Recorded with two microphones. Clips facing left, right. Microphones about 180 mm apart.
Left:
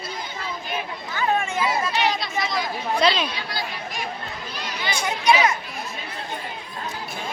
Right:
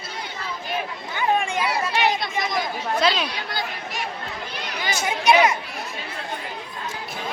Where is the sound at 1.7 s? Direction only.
55° right (ahead or behind).